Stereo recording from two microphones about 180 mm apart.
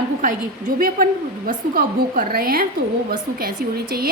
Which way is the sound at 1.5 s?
50° right (ahead or behind).